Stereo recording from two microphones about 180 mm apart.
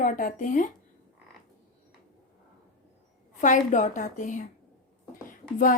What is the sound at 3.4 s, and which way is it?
A woman's voice, 45° left (ahead or behind).